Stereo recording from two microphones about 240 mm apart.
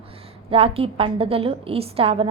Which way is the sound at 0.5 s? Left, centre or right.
Right.